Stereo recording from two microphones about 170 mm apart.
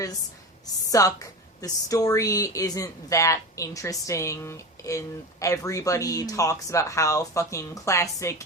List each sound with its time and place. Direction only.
0.9 s a woman's voice: 20° left (ahead or behind)